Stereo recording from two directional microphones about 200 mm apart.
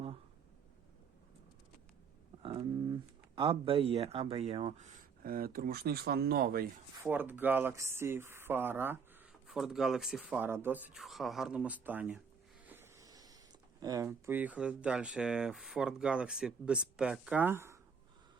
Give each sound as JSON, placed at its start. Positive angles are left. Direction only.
{"t": 2.4, "sound": "speech", "side_deg": -25}
{"t": 7.0, "sound": "speech", "side_deg": -10}